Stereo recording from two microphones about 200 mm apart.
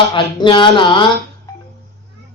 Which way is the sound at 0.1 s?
25° left (ahead or behind).